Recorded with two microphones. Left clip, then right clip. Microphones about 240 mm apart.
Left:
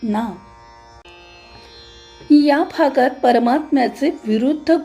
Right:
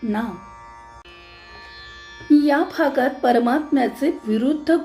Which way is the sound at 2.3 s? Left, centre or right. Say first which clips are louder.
Left 3 dB; left.